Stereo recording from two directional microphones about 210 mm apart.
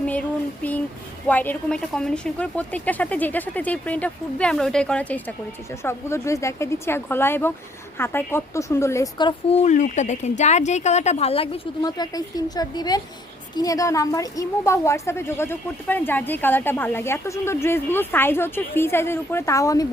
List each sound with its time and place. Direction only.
0.0 s a sound: 5° left (ahead or behind)
1.3 s a woman's voice: 5° left (ahead or behind); by 11.4 s 30° left (ahead or behind)
11.8 s a woman's voice: 20° left (ahead or behind)